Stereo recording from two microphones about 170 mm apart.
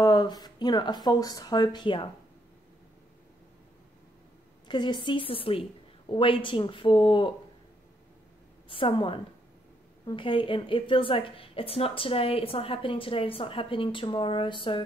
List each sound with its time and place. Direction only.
0.0 s a woman's voice: 25° left (ahead or behind)
4.6 s a woman's voice: 25° left (ahead or behind)
8.6 s a woman's voice: 30° left (ahead or behind)